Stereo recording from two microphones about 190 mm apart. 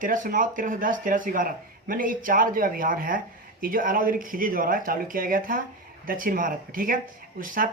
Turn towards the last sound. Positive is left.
turn(degrees=-45)  # may be behind; listen again after turning